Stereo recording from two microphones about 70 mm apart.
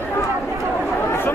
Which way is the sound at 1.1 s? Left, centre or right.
Left.